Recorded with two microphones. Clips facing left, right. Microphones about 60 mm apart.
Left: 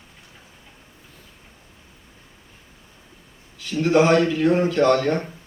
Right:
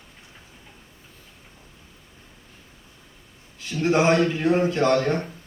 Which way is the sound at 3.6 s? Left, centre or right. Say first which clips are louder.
Left 3 dB; right.